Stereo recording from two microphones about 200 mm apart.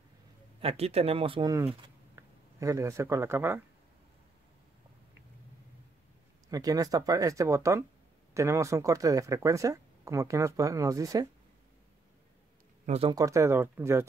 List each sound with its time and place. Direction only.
0.6 s speech: 30° right (ahead or behind); by 3.6 s 10° right (ahead or behind)
6.5 s speech: 15° right (ahead or behind)
12.8 s speech: 30° right (ahead or behind)
13.1 s speech: 15° right (ahead or behind)